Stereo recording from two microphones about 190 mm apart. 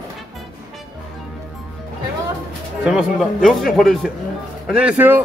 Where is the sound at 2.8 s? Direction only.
5° right (ahead or behind).